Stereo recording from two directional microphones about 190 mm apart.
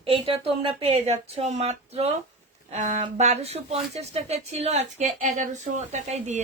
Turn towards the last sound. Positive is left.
turn(degrees=-40)  # may be behind; listen again after turning